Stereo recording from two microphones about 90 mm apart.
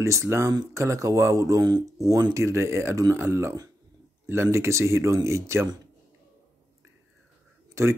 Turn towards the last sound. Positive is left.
turn(degrees=-35)  # may be behind; listen again after turning